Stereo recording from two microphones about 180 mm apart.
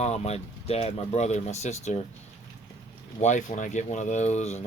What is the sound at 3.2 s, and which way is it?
Speech, 40° left (ahead or behind).